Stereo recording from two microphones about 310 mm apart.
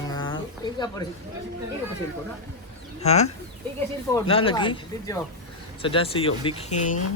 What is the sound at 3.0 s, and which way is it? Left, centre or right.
Speech, left.